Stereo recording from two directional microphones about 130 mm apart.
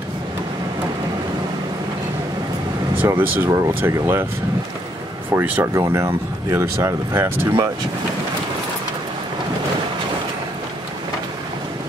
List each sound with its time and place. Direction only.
3.0 s speech: 15° right (ahead or behind)
5.3 s speech: 15° right (ahead or behind)
5.8 s speech: 25° right (ahead or behind)